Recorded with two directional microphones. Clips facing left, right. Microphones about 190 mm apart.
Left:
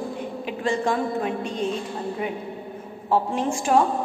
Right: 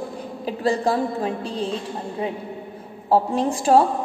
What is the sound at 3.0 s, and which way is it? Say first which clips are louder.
Speech: right 3 dB; 35° right (ahead or behind).